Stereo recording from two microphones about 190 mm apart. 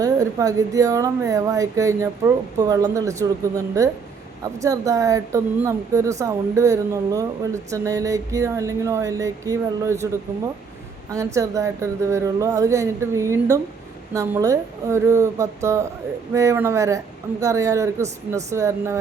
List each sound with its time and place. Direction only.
0.0 s a woman's voice: 15° right (ahead or behind)
11.1 s a woman's voice: 15° right (ahead or behind)